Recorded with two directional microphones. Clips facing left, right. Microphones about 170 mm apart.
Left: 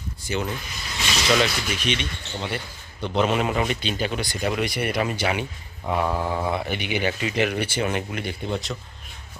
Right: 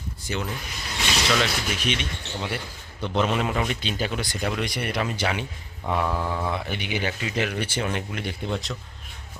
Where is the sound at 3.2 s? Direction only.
5° left (ahead or behind).